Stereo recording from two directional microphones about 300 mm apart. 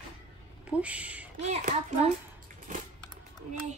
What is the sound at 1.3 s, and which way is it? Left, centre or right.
Speech, right.